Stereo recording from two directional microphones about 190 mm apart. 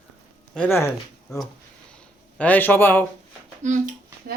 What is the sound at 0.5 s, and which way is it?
A man's voice, 10° left (ahead or behind).